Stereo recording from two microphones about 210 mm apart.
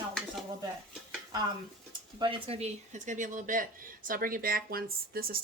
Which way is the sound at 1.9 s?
20° right (ahead or behind).